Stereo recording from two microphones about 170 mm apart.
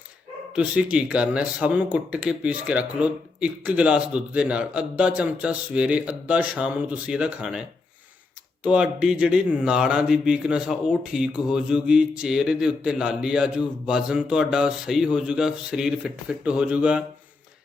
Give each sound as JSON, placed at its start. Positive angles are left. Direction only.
{"t": 0.5, "sound": "speech", "side_deg": -5}
{"t": 8.6, "sound": "speech", "side_deg": -5}